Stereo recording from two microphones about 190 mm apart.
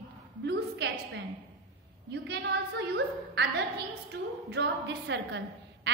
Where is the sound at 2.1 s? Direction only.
60° right (ahead or behind).